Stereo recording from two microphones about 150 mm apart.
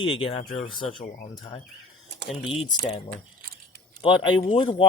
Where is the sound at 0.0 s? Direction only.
35° left (ahead or behind).